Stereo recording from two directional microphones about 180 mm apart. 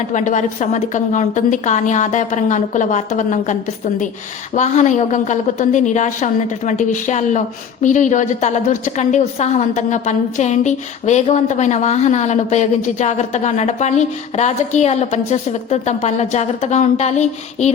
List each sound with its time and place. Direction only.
0.1 s a woman's voice: 40° left (ahead or behind)